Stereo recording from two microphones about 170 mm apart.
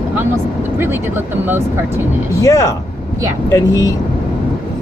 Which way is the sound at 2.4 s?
20° left (ahead or behind).